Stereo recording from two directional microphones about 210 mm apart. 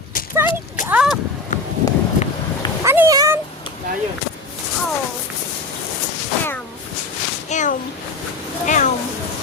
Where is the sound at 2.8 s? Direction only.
10° right (ahead or behind).